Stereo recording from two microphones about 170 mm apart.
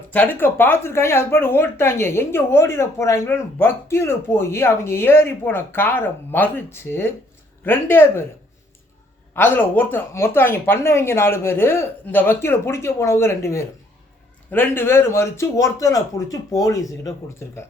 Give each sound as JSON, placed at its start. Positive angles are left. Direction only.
{"t": 0.1, "sound": "a woman's voice", "side_deg": 10}
{"t": 9.3, "sound": "a woman's voice", "side_deg": 10}